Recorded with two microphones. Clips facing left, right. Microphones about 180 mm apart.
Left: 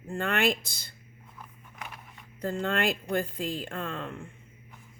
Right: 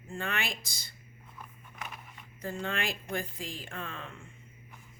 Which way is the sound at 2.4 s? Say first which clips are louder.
Left 6 dB; 60° left (ahead or behind).